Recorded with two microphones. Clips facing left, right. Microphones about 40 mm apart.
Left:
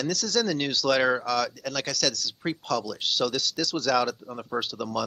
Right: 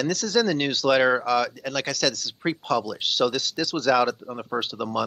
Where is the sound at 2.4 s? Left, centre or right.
Centre.